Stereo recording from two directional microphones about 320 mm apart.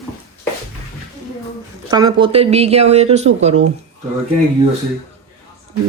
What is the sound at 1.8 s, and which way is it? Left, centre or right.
Speech, centre.